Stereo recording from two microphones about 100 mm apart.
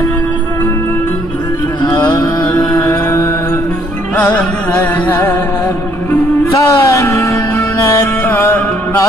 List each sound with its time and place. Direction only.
2.1 s music: 45° left (ahead or behind)
5.0 s music: 20° left (ahead or behind)
6.5 s music: 30° left (ahead or behind)